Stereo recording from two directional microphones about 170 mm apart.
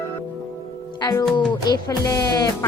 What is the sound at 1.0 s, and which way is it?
Speech, 20° left (ahead or behind).